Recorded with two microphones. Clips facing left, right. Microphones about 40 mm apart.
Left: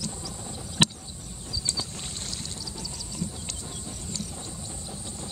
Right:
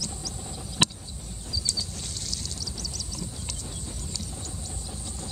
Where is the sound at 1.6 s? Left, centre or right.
Left.